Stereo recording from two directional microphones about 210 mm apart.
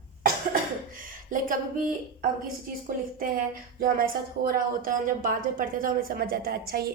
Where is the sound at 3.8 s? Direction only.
40° right (ahead or behind).